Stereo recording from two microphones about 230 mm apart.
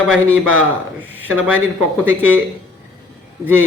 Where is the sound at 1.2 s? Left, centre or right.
Centre.